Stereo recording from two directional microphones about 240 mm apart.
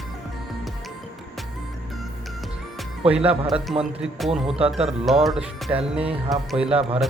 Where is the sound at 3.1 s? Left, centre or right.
Right.